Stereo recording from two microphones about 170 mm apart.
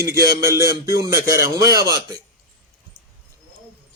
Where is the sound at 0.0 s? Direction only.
15° right (ahead or behind).